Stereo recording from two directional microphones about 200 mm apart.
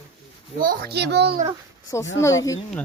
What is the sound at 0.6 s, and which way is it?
Speech, 45° right (ahead or behind).